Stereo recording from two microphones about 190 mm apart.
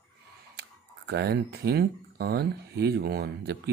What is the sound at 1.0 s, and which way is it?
Speech, 60° right (ahead or behind).